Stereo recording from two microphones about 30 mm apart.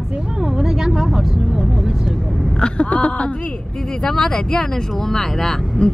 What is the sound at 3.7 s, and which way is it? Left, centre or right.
Speech, left.